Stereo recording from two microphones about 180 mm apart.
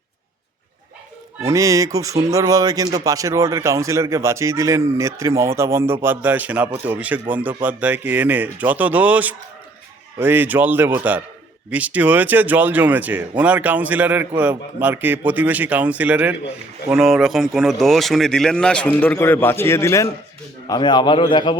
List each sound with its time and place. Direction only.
1.4 s a man's voice: 15° right (ahead or behind); by 21.5 s 25° left (ahead or behind)